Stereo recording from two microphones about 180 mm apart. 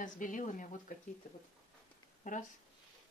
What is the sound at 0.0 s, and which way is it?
Speech, 45° left (ahead or behind).